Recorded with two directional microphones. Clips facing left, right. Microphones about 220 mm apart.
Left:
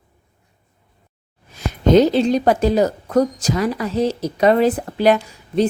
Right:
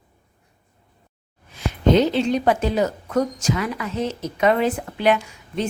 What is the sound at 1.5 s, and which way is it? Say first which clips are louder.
A woman's voice: left 4 dB; 40° left (ahead or behind).